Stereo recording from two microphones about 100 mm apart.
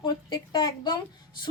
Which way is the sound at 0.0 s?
45° left (ahead or behind).